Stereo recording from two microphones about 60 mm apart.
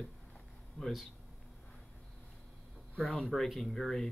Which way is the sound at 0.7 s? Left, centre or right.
Centre.